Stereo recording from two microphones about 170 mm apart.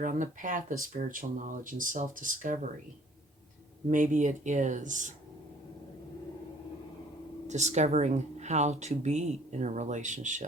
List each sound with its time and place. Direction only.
0.0 s speech: 50° right (ahead or behind)
3.8 s speech: 50° right (ahead or behind)
7.4 s speech: 40° right (ahead or behind)